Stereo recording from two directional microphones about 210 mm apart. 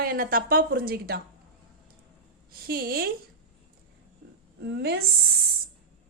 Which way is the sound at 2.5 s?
45° right (ahead or behind).